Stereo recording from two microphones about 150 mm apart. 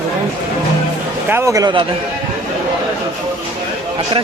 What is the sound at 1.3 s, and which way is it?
Speech, 20° right (ahead or behind).